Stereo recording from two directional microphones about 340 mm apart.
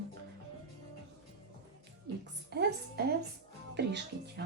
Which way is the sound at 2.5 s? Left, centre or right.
Right.